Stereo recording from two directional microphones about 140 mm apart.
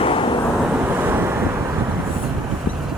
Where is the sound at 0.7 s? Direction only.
10° right (ahead or behind).